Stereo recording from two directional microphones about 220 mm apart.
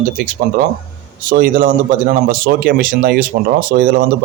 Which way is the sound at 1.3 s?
40° right (ahead or behind).